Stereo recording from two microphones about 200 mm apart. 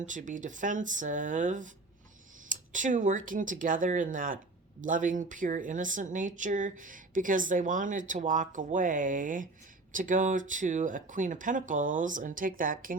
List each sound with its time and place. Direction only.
0.0 s speech: 40° right (ahead or behind)